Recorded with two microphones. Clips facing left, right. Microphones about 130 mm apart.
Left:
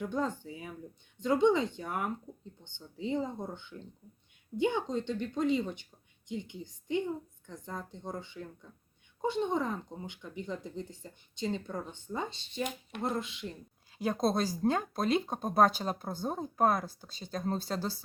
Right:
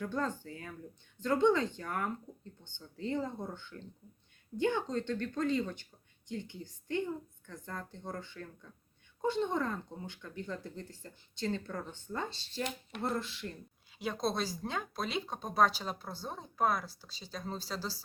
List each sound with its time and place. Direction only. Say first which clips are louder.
0.4 s a woman's voice: left 2 dB; 15° left (ahead or behind)
14.0 s speech: left 5 dB; 45° left (ahead or behind)